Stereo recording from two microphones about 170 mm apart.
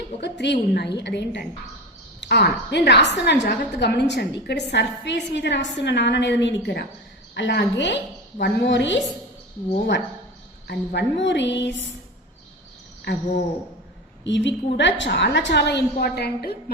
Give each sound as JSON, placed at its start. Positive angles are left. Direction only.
{"t": 0.2, "sound": "a woman's voice", "side_deg": 90}
{"t": 10.7, "sound": "a woman's voice", "side_deg": 90}
{"t": 14.3, "sound": "a woman's voice", "side_deg": 90}